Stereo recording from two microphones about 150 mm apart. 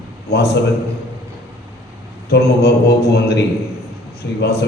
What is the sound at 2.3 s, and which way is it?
Mantra, 90° left.